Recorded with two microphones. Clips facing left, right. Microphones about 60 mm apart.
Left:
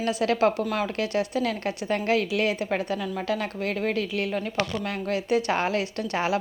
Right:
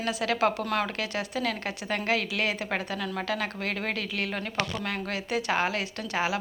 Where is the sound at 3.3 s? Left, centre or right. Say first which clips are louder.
Left 5 dB; right.